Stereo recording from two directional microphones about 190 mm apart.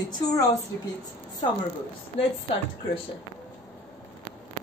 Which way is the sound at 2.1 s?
30° left (ahead or behind).